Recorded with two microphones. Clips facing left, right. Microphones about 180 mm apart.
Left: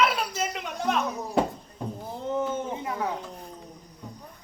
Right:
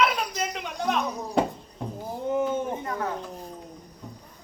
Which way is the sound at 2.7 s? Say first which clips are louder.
Even; 15° left (ahead or behind).